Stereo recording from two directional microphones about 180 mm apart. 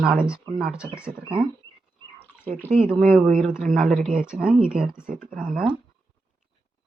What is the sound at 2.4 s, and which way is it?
A man's voice, 10° left (ahead or behind).